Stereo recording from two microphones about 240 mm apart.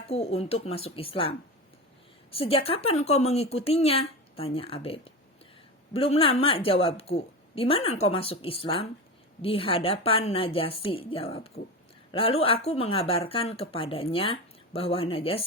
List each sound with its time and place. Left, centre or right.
0.1 s a woman's voice: left